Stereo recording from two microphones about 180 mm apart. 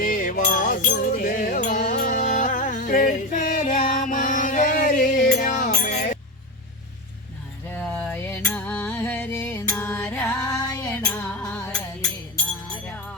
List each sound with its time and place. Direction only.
0.0 s music: 50° left (ahead or behind)
7.7 s music: 5° left (ahead or behind)